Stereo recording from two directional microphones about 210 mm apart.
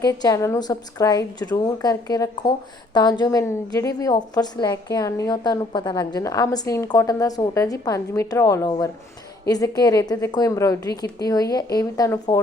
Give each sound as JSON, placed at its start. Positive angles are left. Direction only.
{"t": 0.0, "sound": "a woman's voice", "side_deg": 20}